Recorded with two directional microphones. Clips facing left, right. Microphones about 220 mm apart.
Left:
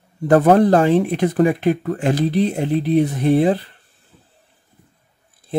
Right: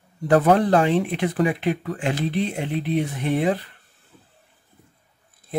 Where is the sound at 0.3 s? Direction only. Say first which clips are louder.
Left 4 dB; 45° left (ahead or behind).